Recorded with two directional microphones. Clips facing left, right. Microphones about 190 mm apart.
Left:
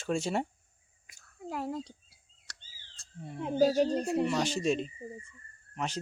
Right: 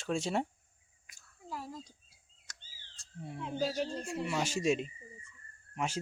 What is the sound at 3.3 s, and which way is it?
Speech, 45° left (ahead or behind).